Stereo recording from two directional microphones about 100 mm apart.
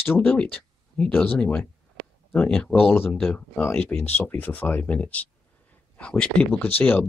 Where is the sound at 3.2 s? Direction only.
10° left (ahead or behind).